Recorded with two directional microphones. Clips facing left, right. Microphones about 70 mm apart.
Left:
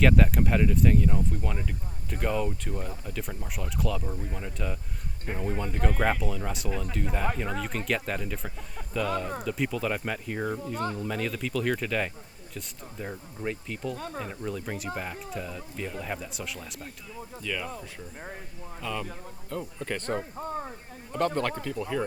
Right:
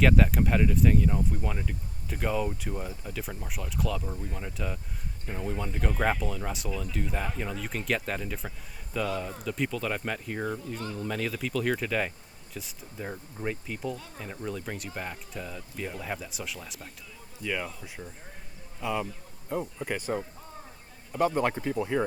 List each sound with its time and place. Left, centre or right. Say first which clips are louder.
0.0 s speech: left 1 dB; centre
6.7 s speech: left 2 dB; left
7.6 s speech: left 1 dB; centre
13.9 s speech: left 5 dB; left
14.3 s speech: left 1 dB; centre
17.4 s speech: right 2 dB; centre
18.8 s speech: right 3 dB; centre
20.4 s a sound: left 12 dB; left
21.1 s speech: right 1 dB; centre